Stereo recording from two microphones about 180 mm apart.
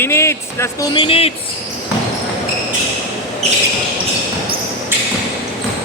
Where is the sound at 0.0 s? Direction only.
15° left (ahead or behind).